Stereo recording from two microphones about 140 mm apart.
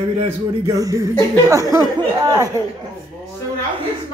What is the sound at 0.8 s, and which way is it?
Speech, 25° right (ahead or behind).